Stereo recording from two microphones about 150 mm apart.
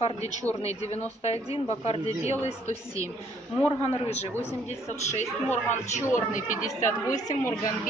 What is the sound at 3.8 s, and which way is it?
Speech, 45° left (ahead or behind).